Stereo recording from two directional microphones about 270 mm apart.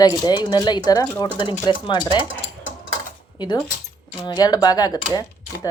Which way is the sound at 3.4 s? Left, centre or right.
Centre.